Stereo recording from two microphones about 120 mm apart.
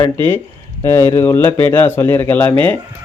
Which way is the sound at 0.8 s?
20° left (ahead or behind).